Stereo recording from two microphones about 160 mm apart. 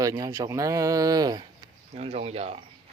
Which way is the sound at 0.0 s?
20° right (ahead or behind).